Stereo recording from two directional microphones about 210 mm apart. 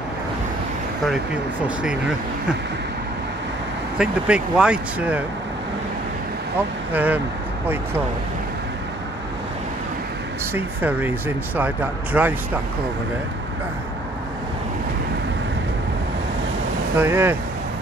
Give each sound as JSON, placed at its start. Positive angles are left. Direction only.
{"t": 1.0, "sound": "speech", "side_deg": -5}
{"t": 4.0, "sound": "speech", "side_deg": -5}
{"t": 6.9, "sound": "speech", "side_deg": -10}
{"t": 10.5, "sound": "speech", "side_deg": -10}
{"t": 17.0, "sound": "speech", "side_deg": -10}